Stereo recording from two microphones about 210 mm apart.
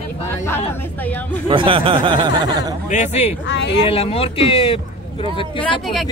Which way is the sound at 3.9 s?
25° left (ahead or behind).